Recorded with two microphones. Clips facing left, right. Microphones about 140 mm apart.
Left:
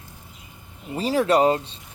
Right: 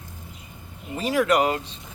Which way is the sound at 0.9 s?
35° left (ahead or behind).